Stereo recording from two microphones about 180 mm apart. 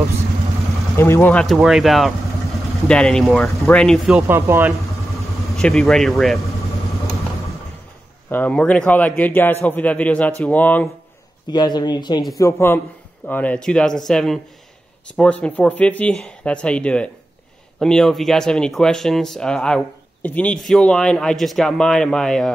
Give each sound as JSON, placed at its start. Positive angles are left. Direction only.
{"t": 0.9, "sound": "speech", "side_deg": 15}
{"t": 3.5, "sound": "a man's voice", "side_deg": 15}
{"t": 3.8, "sound": "speech", "side_deg": 0}
{"t": 4.3, "sound": "speech", "side_deg": -15}
{"t": 5.5, "sound": "speech", "side_deg": 0}
{"t": 8.3, "sound": "a man's voice", "side_deg": 10}
{"t": 11.5, "sound": "a man's voice", "side_deg": 25}